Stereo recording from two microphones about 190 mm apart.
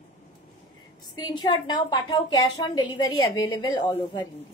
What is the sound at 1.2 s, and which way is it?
A woman's voice, 25° left (ahead or behind).